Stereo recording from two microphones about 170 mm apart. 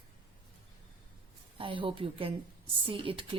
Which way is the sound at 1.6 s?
30° right (ahead or behind).